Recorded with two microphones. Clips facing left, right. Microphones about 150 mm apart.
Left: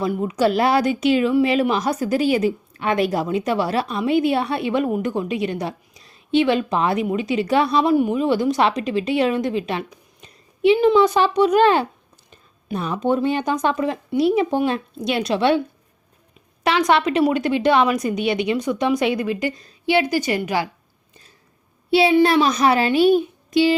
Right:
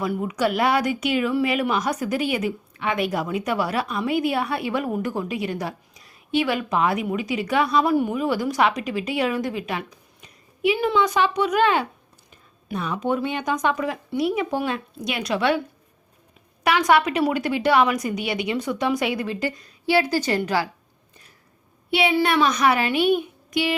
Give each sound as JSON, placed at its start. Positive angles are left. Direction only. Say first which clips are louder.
{"t": 0.0, "sound": "speech", "louder": "left 4 dB", "side_deg": 25}
{"t": 16.6, "sound": "a woman's voice", "louder": "left 1 dB", "side_deg": 25}
{"t": 21.8, "sound": "a child's voice", "louder": "left 6 dB", "side_deg": 30}